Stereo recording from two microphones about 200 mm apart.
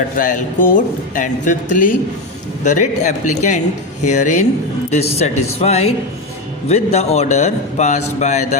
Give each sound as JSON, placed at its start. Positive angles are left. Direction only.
{"t": 0.2, "sound": "a man's voice", "side_deg": 40}